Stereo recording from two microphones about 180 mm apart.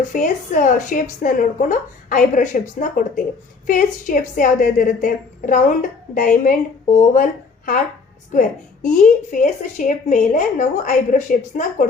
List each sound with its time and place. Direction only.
0.1 s a woman's voice: 45° left (ahead or behind)